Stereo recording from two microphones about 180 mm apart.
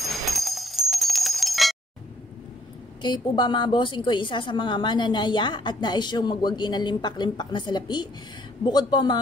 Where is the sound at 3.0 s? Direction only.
25° left (ahead or behind).